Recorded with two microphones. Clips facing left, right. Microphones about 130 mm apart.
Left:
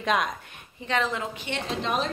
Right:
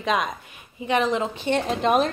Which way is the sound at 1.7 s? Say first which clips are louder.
Right 6 dB; 55° right (ahead or behind).